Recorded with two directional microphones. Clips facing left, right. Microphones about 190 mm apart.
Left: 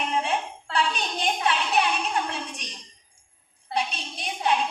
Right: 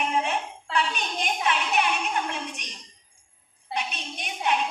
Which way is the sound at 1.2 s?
35° left (ahead or behind).